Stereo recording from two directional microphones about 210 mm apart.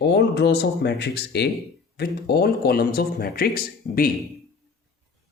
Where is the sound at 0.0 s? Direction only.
55° left (ahead or behind).